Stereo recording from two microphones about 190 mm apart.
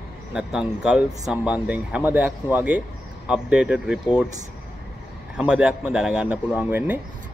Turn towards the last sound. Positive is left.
turn(degrees=-10)  # may be behind; listen again after turning